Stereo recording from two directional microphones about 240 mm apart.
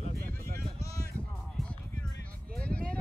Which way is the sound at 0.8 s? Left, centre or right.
Centre.